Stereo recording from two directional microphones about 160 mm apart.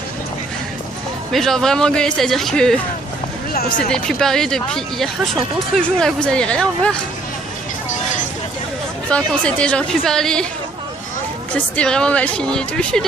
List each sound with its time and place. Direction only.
1.3 s speech: 5° left (ahead or behind)
3.9 s speech: 5° left (ahead or behind)
9.0 s a woman's voice: 5° left (ahead or behind)
11.5 s speech: 5° left (ahead or behind)